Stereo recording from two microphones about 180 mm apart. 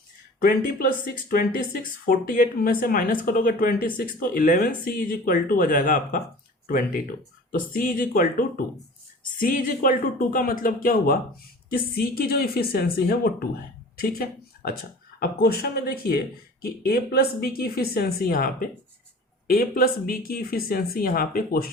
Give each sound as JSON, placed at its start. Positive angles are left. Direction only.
{"t": 0.4, "sound": "speech", "side_deg": 50}